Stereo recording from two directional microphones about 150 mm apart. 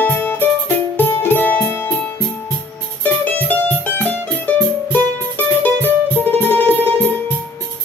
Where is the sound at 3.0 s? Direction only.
10° left (ahead or behind).